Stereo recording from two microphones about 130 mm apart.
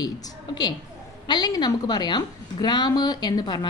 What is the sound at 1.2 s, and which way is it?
A woman's voice, 35° left (ahead or behind).